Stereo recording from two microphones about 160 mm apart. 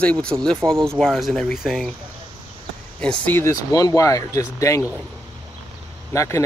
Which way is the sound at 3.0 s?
10° left (ahead or behind).